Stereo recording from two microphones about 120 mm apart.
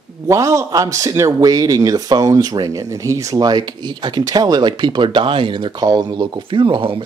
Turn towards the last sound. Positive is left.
turn(degrees=-45)  # may be behind; listen again after turning